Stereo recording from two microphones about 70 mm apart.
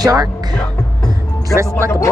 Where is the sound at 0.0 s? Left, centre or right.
Right.